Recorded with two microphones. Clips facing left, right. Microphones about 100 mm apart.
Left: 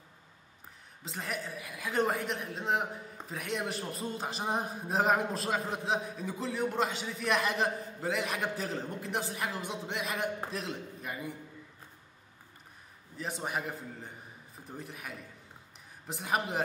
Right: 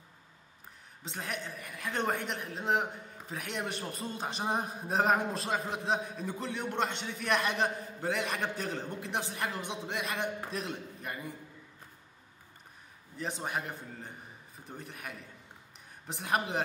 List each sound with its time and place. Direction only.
1.0 s a woman's voice: centre (ahead or behind)
13.2 s a woman's voice: centre (ahead or behind)